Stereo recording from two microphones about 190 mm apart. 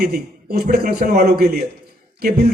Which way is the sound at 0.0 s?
55° right (ahead or behind).